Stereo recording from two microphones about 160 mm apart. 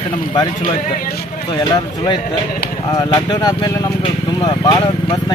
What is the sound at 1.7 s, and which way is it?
Speech, 25° left (ahead or behind).